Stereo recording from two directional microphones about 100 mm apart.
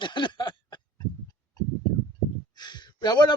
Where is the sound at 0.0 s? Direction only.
55° left (ahead or behind).